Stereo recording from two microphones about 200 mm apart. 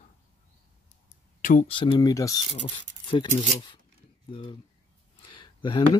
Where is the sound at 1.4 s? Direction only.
40° left (ahead or behind).